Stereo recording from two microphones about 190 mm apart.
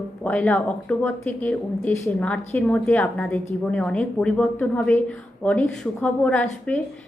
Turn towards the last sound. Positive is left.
turn(degrees=5)  # may be behind; listen again after turning